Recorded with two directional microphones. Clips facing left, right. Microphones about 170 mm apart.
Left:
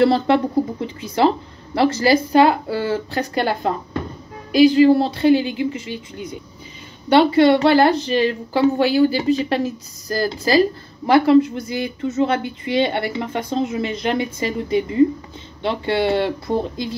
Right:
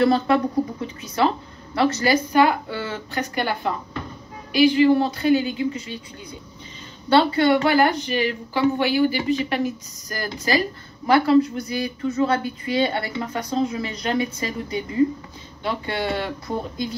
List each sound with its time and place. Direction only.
0.0 s a woman's voice: 30° left (ahead or behind)
4.7 s speech: 35° left (ahead or behind)
7.1 s a woman's voice: 20° left (ahead or behind)